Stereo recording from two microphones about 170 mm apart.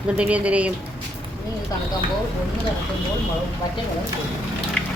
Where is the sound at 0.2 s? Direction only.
5° right (ahead or behind).